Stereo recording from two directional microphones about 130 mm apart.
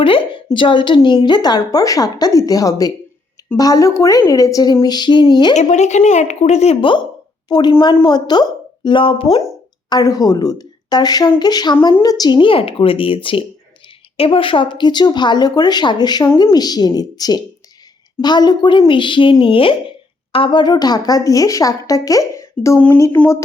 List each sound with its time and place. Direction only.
0.0 s a woman's voice: 40° left (ahead or behind)
5.7 s speech: 60° left (ahead or behind)
7.4 s speech: 35° left (ahead or behind)
9.9 s a woman's voice: 30° left (ahead or behind)